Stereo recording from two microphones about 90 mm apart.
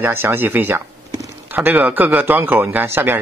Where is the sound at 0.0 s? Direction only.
25° right (ahead or behind).